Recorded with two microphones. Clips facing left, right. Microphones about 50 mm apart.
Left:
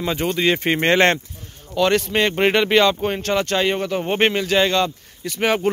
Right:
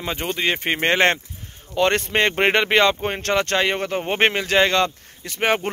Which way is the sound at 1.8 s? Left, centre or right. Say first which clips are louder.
Left 1 dB; right.